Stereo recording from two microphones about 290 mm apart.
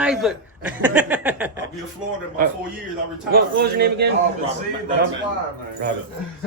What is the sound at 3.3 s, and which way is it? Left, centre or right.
Speech, right.